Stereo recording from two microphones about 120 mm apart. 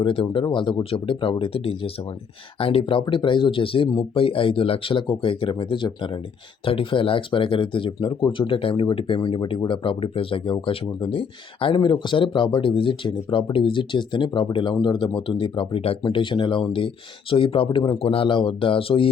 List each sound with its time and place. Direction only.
0.0 s speech: 45° left (ahead or behind)
16.0 s speech: 40° left (ahead or behind)